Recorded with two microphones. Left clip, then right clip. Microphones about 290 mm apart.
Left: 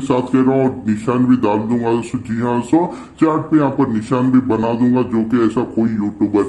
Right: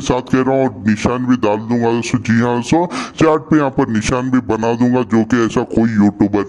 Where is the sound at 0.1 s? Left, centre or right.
Right.